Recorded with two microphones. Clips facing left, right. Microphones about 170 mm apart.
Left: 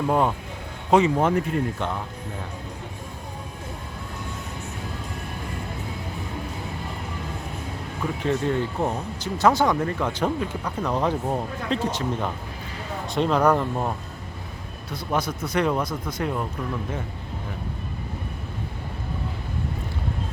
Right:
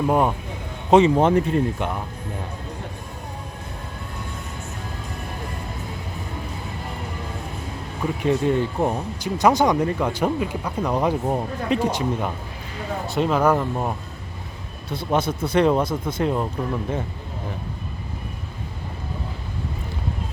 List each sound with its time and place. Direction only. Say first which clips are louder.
0.1 s speech: right 1 dB; 15° right (ahead or behind)
0.9 s speech: right 4 dB; 25° right (ahead or behind)
8.2 s speech: right 4 dB; 15° right (ahead or behind)
14.8 s speech: right 4 dB; 25° right (ahead or behind)